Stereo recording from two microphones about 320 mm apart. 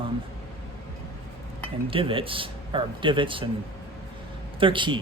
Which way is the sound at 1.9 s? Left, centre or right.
Centre.